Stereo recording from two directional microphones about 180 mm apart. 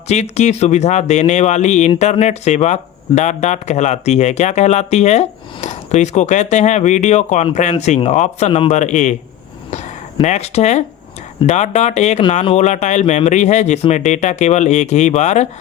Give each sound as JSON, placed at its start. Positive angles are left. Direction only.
{"t": 0.1, "sound": "speech", "side_deg": 40}
{"t": 9.6, "sound": "a sound", "side_deg": 40}
{"t": 11.4, "sound": "speech", "side_deg": 40}